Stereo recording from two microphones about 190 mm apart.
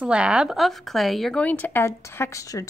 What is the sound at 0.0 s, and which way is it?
A woman's voice, 5° right (ahead or behind).